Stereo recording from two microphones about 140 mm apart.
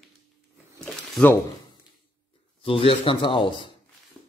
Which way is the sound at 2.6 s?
40° left (ahead or behind).